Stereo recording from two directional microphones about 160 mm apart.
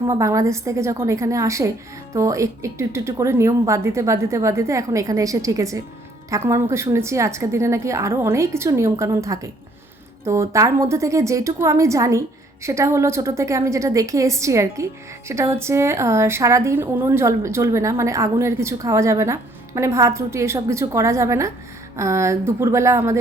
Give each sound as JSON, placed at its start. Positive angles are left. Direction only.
{"t": 0.1, "sound": "a woman's voice", "side_deg": -20}